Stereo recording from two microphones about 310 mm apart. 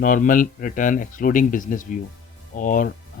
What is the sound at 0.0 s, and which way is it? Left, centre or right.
Speech, left.